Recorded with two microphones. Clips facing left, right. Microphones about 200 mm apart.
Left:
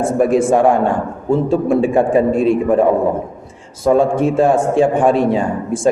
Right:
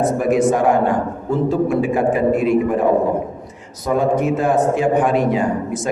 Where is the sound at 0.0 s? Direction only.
30° left (ahead or behind).